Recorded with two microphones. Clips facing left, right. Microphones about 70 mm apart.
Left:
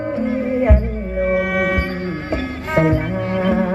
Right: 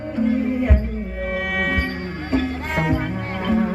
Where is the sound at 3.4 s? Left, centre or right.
Left.